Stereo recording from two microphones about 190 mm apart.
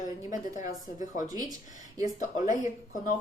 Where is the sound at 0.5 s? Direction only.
40° left (ahead or behind).